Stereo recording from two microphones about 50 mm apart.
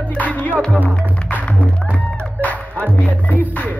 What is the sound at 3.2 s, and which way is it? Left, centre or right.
Music, left.